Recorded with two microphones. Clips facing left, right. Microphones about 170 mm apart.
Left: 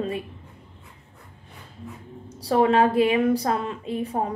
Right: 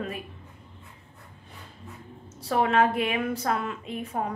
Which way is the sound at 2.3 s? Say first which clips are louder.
Left 5 dB; 35° left (ahead or behind).